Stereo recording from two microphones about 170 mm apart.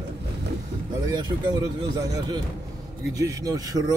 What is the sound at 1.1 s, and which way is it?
Speech, 25° right (ahead or behind).